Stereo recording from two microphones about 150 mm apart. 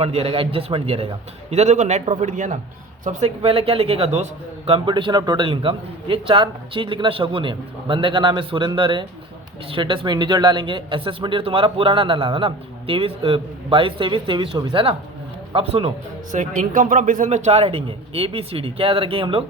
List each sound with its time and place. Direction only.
0.0 s a man's voice: 40° right (ahead or behind)
16.3 s a man's voice: 60° right (ahead or behind); by 19.5 s 35° right (ahead or behind)